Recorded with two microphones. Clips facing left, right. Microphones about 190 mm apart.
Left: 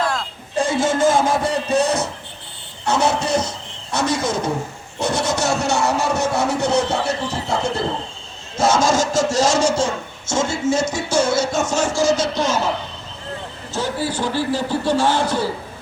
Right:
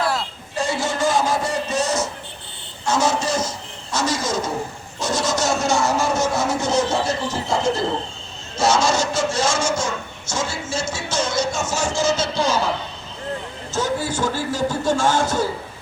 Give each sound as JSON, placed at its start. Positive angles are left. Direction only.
{"t": 0.0, "sound": "a sound", "side_deg": -5}
{"t": 0.5, "sound": "a sound", "side_deg": 50}
{"t": 8.5, "sound": "speech", "side_deg": 50}
{"t": 11.7, "sound": "music", "side_deg": -10}
{"t": 12.0, "sound": "speech", "side_deg": -30}
{"t": 13.7, "sound": "speech", "side_deg": -45}